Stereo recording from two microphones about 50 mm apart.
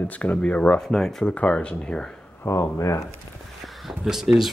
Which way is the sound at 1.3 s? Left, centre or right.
Left.